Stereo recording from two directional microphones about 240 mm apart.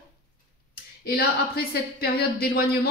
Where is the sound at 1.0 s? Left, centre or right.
Left.